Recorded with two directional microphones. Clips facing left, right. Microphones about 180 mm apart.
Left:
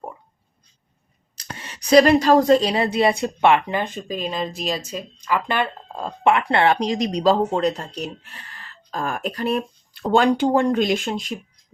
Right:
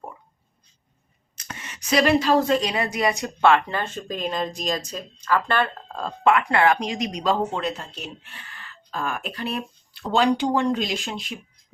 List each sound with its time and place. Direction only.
1.4 s a woman's voice: 35° left (ahead or behind); by 6.1 s 15° left (ahead or behind)
6.2 s speech: 30° left (ahead or behind); by 11.3 s 45° left (ahead or behind)